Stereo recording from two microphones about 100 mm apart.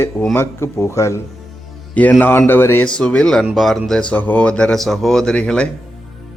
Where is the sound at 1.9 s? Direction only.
15° left (ahead or behind).